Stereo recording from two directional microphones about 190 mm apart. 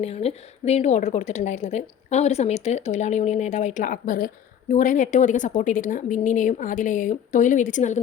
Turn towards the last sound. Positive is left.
turn(degrees=40)  # may be behind; listen again after turning